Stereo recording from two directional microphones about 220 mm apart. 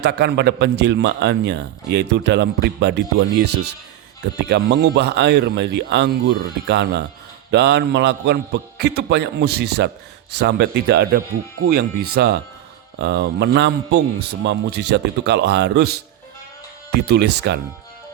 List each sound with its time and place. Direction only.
0.0 s a man's voice: 50° right (ahead or behind)